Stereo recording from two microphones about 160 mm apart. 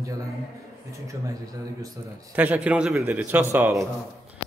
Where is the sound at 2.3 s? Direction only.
10° right (ahead or behind).